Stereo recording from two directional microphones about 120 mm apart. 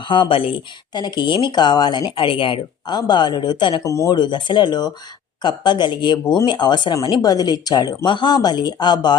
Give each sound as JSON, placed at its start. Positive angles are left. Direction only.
{"t": 0.0, "sound": "speech", "side_deg": 45}
{"t": 3.8, "sound": "speech", "side_deg": 25}
{"t": 4.1, "sound": "speech", "side_deg": 40}